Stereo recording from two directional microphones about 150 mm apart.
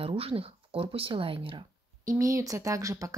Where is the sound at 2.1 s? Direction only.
20° right (ahead or behind).